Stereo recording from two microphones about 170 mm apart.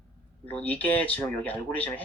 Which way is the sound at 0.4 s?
10° left (ahead or behind).